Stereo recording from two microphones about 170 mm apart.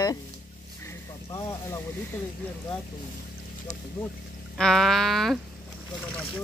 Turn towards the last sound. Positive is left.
turn(degrees=0)  # may be behind; listen again after turning